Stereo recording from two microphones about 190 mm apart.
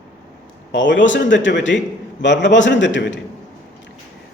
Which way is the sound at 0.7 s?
75° left (ahead or behind).